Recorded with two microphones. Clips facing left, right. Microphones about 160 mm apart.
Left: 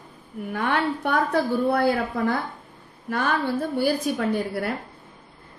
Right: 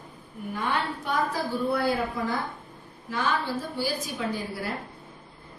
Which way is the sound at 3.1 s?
60° left (ahead or behind).